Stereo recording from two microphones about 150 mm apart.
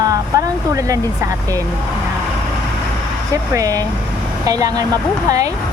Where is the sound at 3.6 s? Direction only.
25° right (ahead or behind).